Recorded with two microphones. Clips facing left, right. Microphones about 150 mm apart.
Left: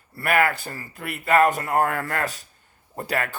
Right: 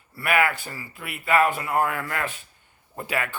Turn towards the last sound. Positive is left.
turn(degrees=40)  # may be behind; listen again after turning